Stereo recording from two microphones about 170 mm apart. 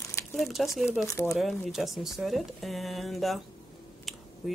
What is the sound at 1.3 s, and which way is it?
Speech, centre (ahead or behind).